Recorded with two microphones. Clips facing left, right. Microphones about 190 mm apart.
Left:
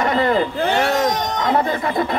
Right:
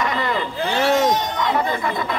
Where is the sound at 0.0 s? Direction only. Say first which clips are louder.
Left 6 dB; 40° left (ahead or behind).